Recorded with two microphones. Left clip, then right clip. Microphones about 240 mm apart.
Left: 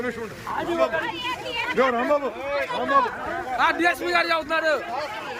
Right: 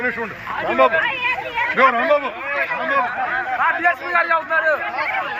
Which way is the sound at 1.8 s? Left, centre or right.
Centre.